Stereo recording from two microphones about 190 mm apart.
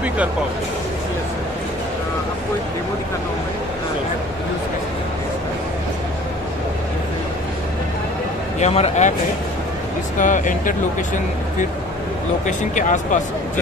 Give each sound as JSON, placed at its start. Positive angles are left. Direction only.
{"t": 8.5, "sound": "speech", "side_deg": 35}
{"t": 10.1, "sound": "speech", "side_deg": 40}
{"t": 12.4, "sound": "speech", "side_deg": 40}